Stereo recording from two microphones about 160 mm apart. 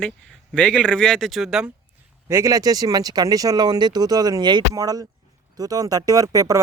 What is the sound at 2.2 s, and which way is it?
A man's voice, 20° right (ahead or behind).